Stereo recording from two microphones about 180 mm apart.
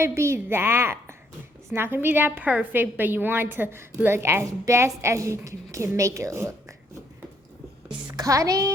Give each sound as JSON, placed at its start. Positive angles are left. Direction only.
{"t": 0.0, "sound": "a woman's voice", "side_deg": -15}
{"t": 8.0, "sound": "a woman's voice", "side_deg": -20}